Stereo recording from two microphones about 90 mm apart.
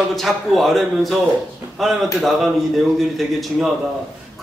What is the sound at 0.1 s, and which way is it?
A man's voice, centre (ahead or behind).